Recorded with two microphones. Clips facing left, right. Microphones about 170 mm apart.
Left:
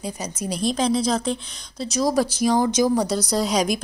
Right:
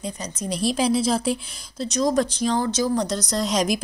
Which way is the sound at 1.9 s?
5° left (ahead or behind).